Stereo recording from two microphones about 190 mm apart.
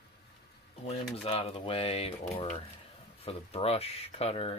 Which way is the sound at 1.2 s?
30° left (ahead or behind).